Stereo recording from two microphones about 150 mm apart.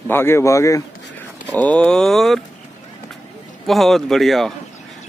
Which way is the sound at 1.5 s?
10° left (ahead or behind).